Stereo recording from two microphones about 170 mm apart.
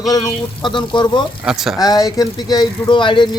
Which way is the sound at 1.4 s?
Centre (ahead or behind).